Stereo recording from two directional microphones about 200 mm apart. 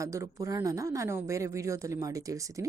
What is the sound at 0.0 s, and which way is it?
Speech, 15° right (ahead or behind).